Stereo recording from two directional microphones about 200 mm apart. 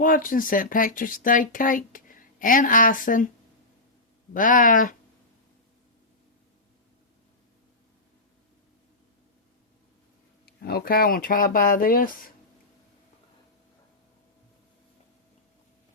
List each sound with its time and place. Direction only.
0.0 s speech: 45° left (ahead or behind)
4.4 s speech: 40° left (ahead or behind)
10.4 s speech: 50° left (ahead or behind)